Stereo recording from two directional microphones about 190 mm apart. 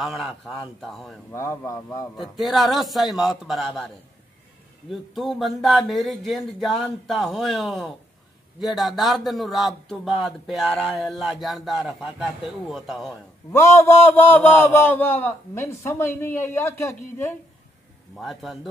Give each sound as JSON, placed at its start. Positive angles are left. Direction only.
{"t": 0.0, "sound": "speech", "side_deg": 0}
{"t": 1.3, "sound": "a man's voice", "side_deg": 15}
{"t": 2.3, "sound": "speech", "side_deg": 0}
{"t": 5.1, "sound": "speech", "side_deg": 0}
{"t": 13.5, "sound": "a man's voice", "side_deg": 15}
{"t": 18.1, "sound": "speech", "side_deg": 0}